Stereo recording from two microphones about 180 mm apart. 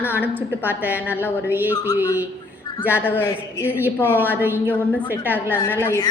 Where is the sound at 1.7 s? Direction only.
15° left (ahead or behind).